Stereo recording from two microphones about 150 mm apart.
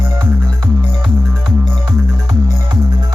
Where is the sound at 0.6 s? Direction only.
30° right (ahead or behind).